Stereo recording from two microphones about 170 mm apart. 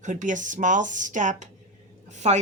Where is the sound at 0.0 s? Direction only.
45° right (ahead or behind).